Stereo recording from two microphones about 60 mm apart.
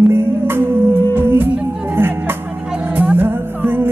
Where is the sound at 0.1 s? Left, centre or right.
Right.